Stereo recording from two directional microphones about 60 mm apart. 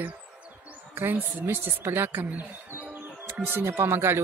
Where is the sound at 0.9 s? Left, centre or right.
Right.